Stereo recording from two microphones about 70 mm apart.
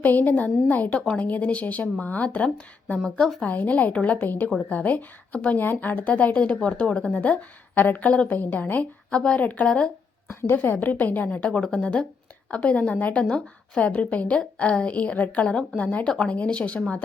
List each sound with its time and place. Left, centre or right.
0.0 s a woman's voice: left
3.0 s a woman's voice: centre
3.4 s a woman's voice: left
10.4 s a woman's voice: left
16.0 s a woman's voice: centre